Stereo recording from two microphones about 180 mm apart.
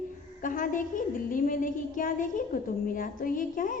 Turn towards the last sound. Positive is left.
turn(degrees=50)  # may be behind; listen again after turning